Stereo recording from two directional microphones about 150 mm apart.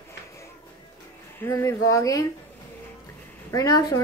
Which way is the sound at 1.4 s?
20° left (ahead or behind).